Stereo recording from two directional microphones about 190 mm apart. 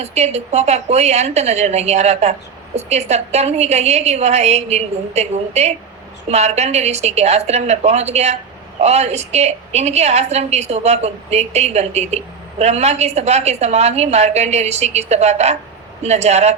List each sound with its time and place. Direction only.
0.0 s a woman's voice: 35° right (ahead or behind)